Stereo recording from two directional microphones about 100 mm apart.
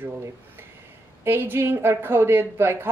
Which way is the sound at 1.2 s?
20° right (ahead or behind).